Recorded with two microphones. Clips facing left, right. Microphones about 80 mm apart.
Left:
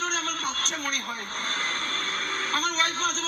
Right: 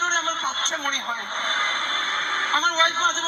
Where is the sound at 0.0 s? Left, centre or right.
Right.